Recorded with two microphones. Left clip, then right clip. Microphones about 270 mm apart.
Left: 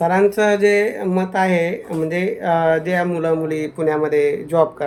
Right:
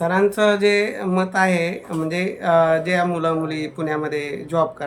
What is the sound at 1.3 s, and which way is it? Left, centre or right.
Speech, right.